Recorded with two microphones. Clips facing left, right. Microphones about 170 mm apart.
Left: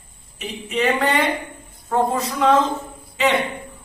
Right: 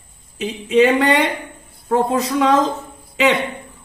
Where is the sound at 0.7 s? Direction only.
75° right (ahead or behind).